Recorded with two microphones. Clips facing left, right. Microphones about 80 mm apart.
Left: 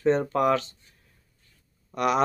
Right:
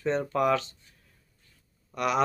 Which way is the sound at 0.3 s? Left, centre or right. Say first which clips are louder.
Left 2 dB; left.